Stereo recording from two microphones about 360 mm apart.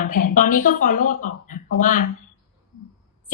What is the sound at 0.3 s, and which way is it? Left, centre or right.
A woman's voice, left.